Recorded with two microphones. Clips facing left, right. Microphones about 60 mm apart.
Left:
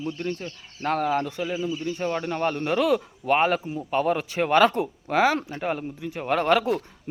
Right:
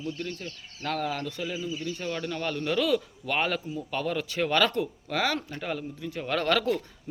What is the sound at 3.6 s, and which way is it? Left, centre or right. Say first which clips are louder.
Speech: left 3 dB; left.